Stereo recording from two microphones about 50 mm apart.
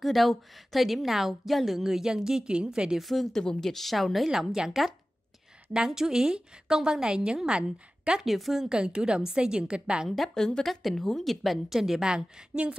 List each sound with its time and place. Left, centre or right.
0.0 s a woman's voice: centre
3.0 s a woman's voice: centre
8.2 s a woman's voice: centre
8.6 s a woman's voice: centre
10.0 s a woman's voice: centre
10.3 s a woman's voice: centre
10.6 s a woman's voice: centre